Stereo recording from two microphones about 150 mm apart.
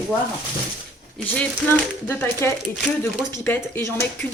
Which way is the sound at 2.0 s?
15° left (ahead or behind).